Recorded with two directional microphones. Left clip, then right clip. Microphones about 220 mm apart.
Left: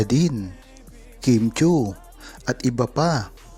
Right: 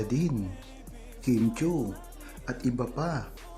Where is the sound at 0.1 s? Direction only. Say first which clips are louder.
Left 8 dB; 35° left (ahead or behind).